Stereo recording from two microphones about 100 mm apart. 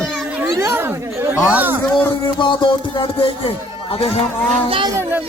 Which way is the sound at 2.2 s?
55° left (ahead or behind).